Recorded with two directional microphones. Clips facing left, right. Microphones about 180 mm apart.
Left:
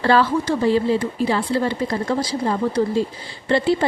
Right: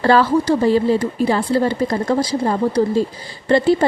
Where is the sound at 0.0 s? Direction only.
40° right (ahead or behind).